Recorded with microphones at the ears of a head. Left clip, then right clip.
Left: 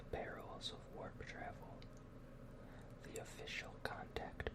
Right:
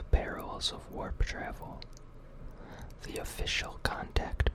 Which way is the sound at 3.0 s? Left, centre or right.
Right.